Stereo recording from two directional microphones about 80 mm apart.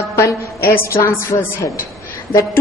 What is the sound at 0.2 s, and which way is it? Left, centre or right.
Music, left.